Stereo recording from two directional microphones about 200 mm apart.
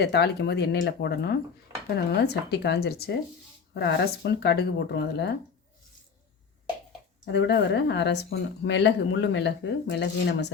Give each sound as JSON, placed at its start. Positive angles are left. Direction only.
{"t": 0.0, "sound": "speech", "side_deg": 55}
{"t": 7.3, "sound": "speech", "side_deg": 60}